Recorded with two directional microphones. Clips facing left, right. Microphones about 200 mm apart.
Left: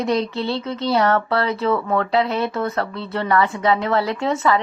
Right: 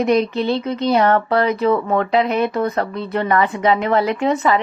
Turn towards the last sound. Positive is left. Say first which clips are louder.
# right 3 dB
turn(degrees=-20)  # may be behind; listen again after turning